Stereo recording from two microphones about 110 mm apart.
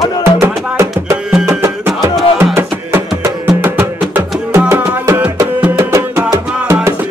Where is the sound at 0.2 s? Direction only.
25° right (ahead or behind).